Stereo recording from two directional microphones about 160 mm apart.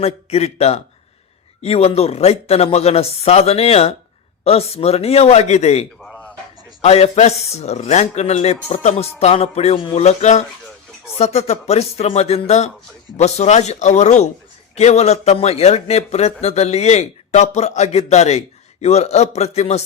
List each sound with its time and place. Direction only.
0.0 s speech: 40° left (ahead or behind)
6.0 s a sound: 5° left (ahead or behind)
6.8 s a man's voice: 40° left (ahead or behind)